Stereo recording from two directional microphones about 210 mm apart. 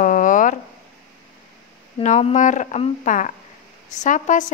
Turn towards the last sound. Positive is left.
turn(degrees=35)  # may be behind; listen again after turning